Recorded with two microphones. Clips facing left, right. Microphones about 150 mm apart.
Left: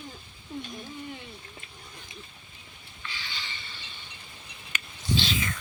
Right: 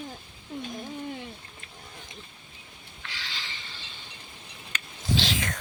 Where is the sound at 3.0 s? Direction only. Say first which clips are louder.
Even; 90° right.